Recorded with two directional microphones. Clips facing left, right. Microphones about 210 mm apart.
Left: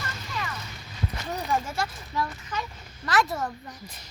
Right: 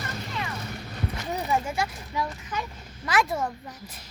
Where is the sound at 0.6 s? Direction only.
60° right (ahead or behind).